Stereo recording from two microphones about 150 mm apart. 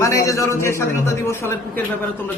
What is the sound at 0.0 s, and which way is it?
A man's voice, 20° left (ahead or behind).